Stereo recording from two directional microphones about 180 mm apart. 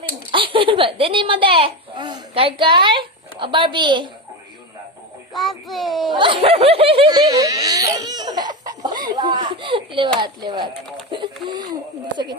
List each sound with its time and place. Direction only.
0.3 s a child's voice: 30° right (ahead or behind)
5.3 s a child's voice: centre (ahead or behind)
6.1 s speech: 30° right (ahead or behind)